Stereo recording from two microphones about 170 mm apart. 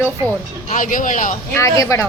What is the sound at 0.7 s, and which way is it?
Speech, 50° left (ahead or behind).